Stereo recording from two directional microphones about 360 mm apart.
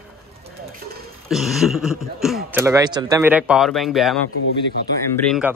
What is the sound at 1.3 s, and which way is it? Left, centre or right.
Speech, centre.